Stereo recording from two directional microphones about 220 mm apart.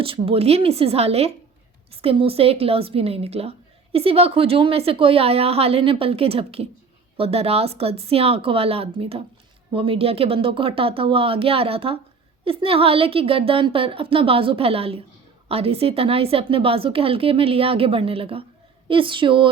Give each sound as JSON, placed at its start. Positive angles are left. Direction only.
{"t": 0.0, "sound": "a woman's voice", "side_deg": -25}